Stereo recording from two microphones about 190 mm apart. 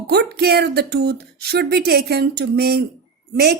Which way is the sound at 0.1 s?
60° right (ahead or behind).